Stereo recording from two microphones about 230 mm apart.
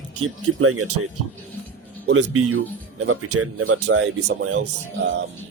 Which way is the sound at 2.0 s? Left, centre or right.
Right.